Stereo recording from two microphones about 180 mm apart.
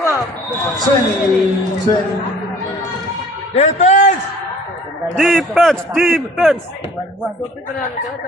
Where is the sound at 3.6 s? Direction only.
40° left (ahead or behind).